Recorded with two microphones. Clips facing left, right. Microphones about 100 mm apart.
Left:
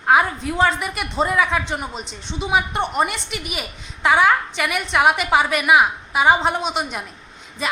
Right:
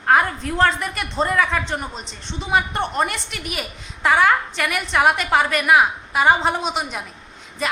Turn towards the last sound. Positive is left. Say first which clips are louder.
# even
turn(degrees=0)  # may be behind; listen again after turning